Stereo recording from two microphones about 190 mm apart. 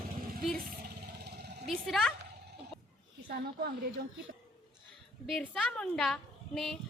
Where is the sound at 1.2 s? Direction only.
60° right (ahead or behind).